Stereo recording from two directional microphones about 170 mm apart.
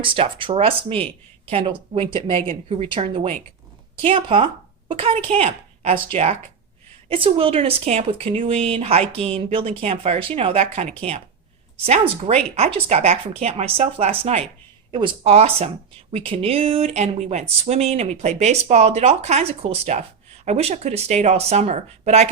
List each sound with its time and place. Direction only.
0.0 s speech: 30° right (ahead or behind)